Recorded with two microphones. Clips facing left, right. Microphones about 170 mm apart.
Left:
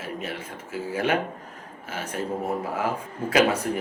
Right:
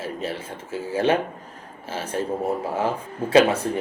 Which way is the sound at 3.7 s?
30° right (ahead or behind).